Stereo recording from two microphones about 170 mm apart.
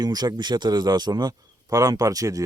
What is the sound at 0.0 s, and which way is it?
A man's voice, 25° right (ahead or behind).